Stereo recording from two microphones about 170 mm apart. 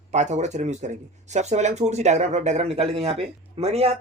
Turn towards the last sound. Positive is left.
turn(degrees=-35)  # may be behind; listen again after turning